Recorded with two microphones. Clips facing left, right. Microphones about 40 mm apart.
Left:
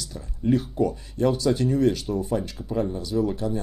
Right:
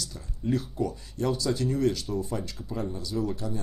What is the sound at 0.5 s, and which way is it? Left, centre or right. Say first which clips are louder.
Speech: left 6 dB; left.